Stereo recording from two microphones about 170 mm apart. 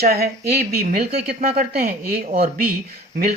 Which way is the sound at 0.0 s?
65° right (ahead or behind).